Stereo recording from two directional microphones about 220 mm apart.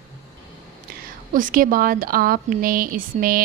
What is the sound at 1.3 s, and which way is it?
A woman's voice, 40° right (ahead or behind).